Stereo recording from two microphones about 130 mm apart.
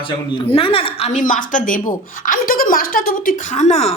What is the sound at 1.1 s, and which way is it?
Speech, 90° left.